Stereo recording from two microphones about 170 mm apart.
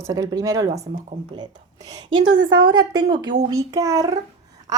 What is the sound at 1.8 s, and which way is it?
A woman's voice, 20° right (ahead or behind).